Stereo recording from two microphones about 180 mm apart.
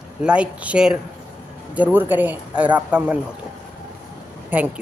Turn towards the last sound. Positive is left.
turn(degrees=-10)  # may be behind; listen again after turning